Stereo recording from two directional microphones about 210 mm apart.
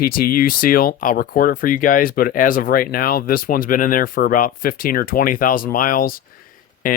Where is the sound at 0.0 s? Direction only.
45° left (ahead or behind).